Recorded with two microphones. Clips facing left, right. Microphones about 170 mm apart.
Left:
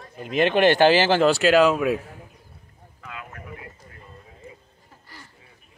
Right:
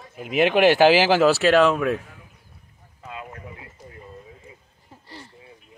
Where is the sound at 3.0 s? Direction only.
25° right (ahead or behind).